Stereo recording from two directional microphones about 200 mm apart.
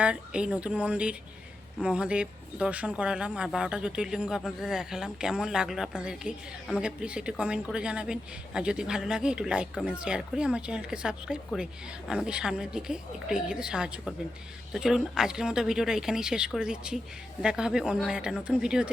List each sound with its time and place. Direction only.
0.0 s speech: 5° right (ahead or behind)